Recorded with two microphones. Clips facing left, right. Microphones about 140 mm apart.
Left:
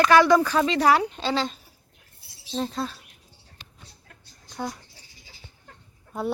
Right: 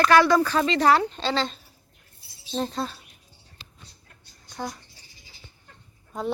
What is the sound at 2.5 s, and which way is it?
Speech, centre (ahead or behind).